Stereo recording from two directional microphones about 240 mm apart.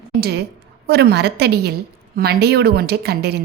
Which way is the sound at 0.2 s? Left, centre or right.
Right.